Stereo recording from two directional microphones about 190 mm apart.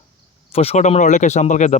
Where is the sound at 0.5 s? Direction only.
30° left (ahead or behind).